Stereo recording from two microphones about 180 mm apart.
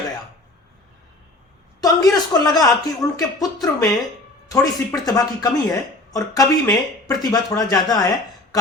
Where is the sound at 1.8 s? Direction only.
20° left (ahead or behind).